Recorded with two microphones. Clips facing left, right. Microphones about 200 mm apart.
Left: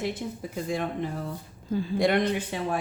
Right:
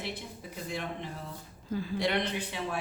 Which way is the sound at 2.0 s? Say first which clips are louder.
Left 8 dB; 50° left (ahead or behind).